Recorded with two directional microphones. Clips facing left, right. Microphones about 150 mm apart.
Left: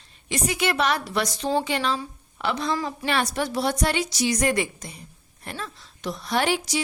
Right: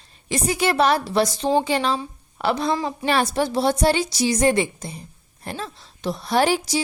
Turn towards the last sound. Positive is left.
turn(degrees=-35)  # may be behind; listen again after turning